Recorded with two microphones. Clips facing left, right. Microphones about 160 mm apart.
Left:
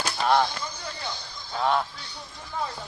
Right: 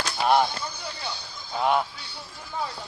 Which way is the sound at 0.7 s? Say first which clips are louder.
Even; 10° right (ahead or behind).